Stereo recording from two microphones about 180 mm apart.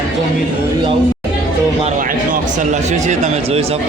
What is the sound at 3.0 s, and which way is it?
Speech, 40° right (ahead or behind).